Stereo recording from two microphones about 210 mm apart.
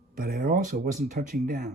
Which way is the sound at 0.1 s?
45° right (ahead or behind).